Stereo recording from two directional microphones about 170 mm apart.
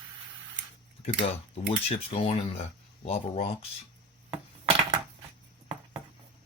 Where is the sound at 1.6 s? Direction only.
40° left (ahead or behind).